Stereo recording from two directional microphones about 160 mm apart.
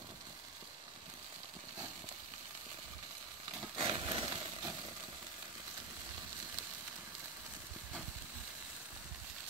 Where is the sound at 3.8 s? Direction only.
35° right (ahead or behind).